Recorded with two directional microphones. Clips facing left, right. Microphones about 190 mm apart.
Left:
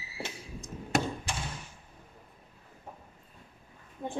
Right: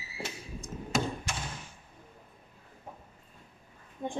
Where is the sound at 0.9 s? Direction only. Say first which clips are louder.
Left 2 dB; 65° left (ahead or behind).